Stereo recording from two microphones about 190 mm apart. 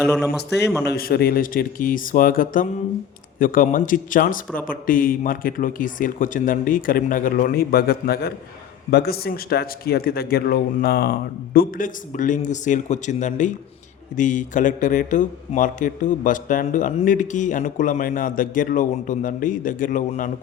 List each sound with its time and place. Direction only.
0.9 s a man's voice: 55° left (ahead or behind)